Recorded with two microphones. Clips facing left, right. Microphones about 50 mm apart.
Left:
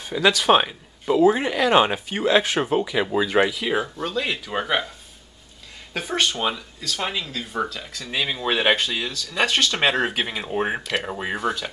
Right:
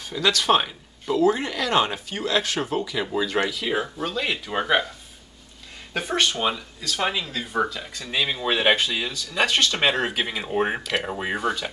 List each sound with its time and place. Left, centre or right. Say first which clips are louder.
0.0 s speech: left 3 dB; centre
3.8 s speech: left 1 dB; centre
5.9 s speech: even; centre